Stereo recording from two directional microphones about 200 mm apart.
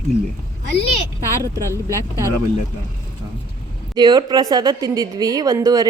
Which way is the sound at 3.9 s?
20° right (ahead or behind).